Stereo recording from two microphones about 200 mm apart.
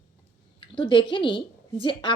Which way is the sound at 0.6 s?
25° left (ahead or behind).